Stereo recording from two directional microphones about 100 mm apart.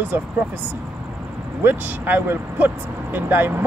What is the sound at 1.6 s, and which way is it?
Speech, 20° right (ahead or behind).